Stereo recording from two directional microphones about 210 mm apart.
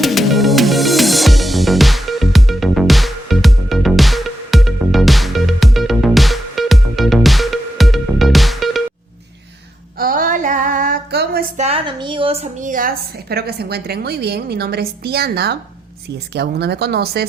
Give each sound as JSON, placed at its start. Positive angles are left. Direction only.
{"t": 0.0, "sound": "music", "side_deg": 0}
{"t": 10.0, "sound": "female singing", "side_deg": -40}
{"t": 11.6, "sound": "a woman's voice", "side_deg": -25}